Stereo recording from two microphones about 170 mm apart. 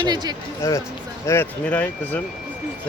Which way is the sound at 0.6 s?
15° left (ahead or behind).